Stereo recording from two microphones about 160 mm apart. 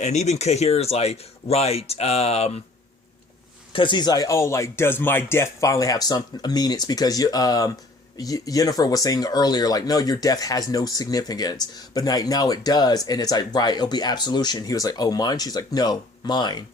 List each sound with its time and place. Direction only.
0.0 s speech: 45° left (ahead or behind)
3.7 s speech: 30° left (ahead or behind)